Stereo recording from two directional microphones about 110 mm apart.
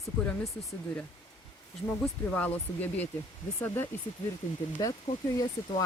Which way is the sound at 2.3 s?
15° left (ahead or behind).